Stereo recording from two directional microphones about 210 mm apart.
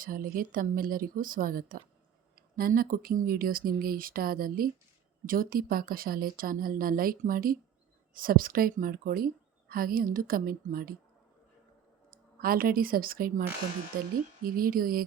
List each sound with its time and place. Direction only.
0.0 s a woman's voice: 40° right (ahead or behind)
12.4 s a woman's voice: 45° right (ahead or behind)